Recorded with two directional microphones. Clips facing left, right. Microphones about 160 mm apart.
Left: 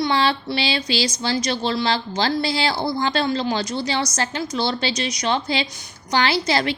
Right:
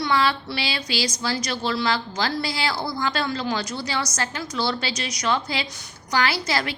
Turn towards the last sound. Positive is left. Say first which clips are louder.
# left 5 dB
turn(degrees=25)  # may be behind; listen again after turning